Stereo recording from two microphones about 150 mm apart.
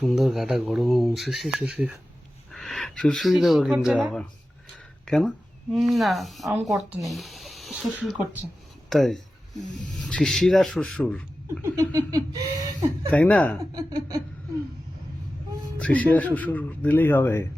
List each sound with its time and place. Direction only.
0.0 s speech: centre (ahead or behind)
8.9 s a sound: centre (ahead or behind)
10.0 s speech: 5° left (ahead or behind)
11.6 s speech: 20° right (ahead or behind)
13.1 s speech: 10° left (ahead or behind)
13.6 s speech: 25° right (ahead or behind)
15.8 s speech: 10° left (ahead or behind)